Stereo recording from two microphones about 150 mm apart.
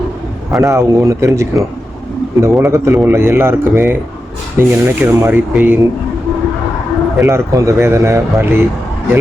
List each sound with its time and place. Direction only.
0.6 s a man's voice: 20° right (ahead or behind)
7.3 s a man's voice: 15° right (ahead or behind)